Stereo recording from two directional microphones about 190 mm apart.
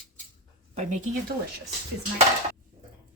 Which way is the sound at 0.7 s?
40° right (ahead or behind).